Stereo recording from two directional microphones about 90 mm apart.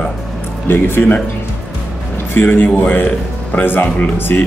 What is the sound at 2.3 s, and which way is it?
Speech, 20° left (ahead or behind).